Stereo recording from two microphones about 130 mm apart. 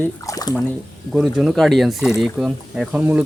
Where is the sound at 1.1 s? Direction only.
5° right (ahead or behind).